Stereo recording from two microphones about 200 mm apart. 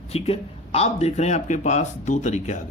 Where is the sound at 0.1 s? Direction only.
30° left (ahead or behind).